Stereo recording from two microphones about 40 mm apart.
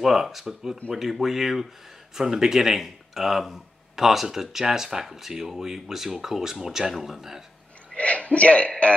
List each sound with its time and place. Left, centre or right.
0.0 s speech: centre
7.9 s a man's voice: left